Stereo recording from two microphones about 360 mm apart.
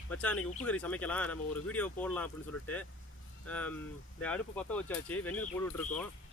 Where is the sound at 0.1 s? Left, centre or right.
Centre.